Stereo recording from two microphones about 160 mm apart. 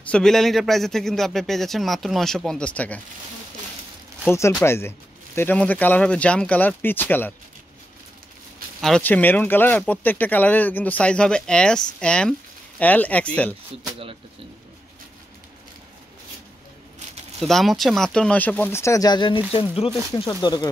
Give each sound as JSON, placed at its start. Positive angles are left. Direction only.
{"t": 0.1, "sound": "a man's voice", "side_deg": 5}
{"t": 4.3, "sound": "speech", "side_deg": 15}
{"t": 8.8, "sound": "speech", "side_deg": 5}
{"t": 17.4, "sound": "speech", "side_deg": 0}
{"t": 20.2, "sound": "speech", "side_deg": 25}